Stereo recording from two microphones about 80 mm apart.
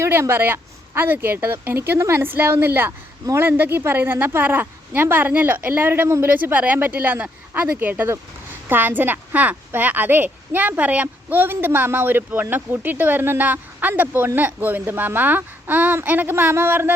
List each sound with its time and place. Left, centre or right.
0.0 s a woman's voice: right